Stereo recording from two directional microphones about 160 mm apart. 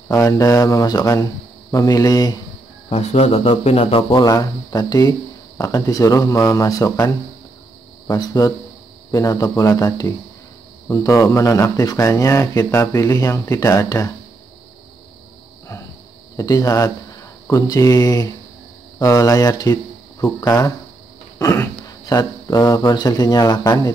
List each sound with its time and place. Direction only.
0.1 s speech: 20° left (ahead or behind)
2.9 s speech: 40° left (ahead or behind); by 7.1 s 20° left (ahead or behind)
8.1 s speech: 25° left (ahead or behind)
16.3 s speech: 20° left (ahead or behind)